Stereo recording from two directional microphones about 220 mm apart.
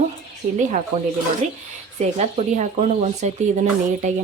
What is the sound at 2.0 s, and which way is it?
Speech, 30° right (ahead or behind).